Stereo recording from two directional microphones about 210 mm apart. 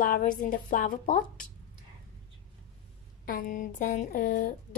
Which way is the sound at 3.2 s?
40° left (ahead or behind).